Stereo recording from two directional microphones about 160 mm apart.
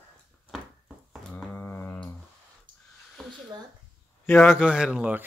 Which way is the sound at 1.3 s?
10° left (ahead or behind).